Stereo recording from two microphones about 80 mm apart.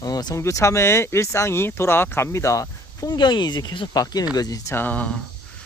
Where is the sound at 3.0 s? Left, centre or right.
Left.